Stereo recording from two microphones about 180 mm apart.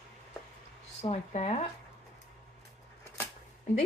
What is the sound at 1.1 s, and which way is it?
Speech, 35° left (ahead or behind).